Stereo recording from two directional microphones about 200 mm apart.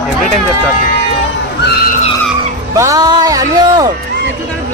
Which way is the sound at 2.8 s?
15° right (ahead or behind).